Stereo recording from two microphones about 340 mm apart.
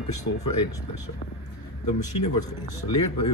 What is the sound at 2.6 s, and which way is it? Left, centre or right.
Speech, centre.